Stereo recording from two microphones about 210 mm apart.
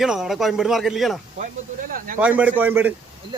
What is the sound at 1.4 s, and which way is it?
Speech, 40° right (ahead or behind).